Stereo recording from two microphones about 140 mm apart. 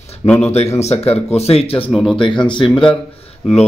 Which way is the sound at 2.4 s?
35° left (ahead or behind).